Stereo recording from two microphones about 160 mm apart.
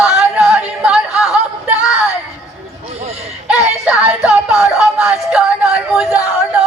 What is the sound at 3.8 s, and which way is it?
Music, 5° right (ahead or behind).